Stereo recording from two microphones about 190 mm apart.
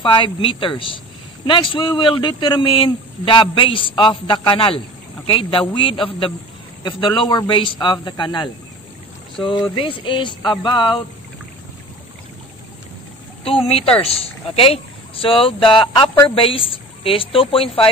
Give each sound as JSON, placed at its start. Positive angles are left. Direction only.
{"t": 0.0, "sound": "a man's voice", "side_deg": 25}
{"t": 13.4, "sound": "a man's voice", "side_deg": 30}